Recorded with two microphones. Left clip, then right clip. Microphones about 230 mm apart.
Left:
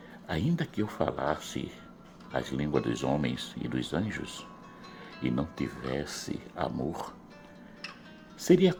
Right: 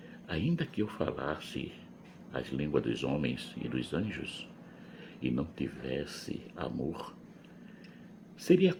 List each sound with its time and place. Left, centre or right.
0.5 s speech: left
8.4 s speech: left